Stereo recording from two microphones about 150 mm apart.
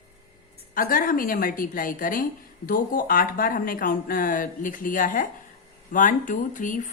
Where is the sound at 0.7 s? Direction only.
65° left (ahead or behind).